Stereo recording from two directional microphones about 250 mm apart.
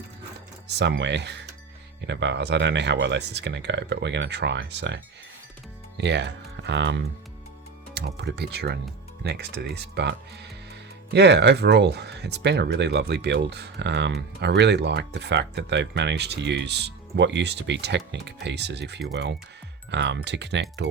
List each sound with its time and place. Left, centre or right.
0.7 s speech: right
6.0 s speech: right